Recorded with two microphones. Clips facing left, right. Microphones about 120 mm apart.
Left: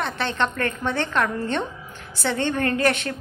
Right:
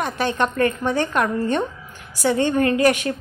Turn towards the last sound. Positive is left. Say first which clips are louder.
# right 4 dB
turn(degrees=-10)  # may be behind; listen again after turning